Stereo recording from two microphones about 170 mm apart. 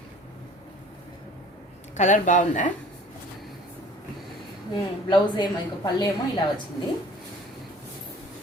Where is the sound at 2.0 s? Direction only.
45° left (ahead or behind).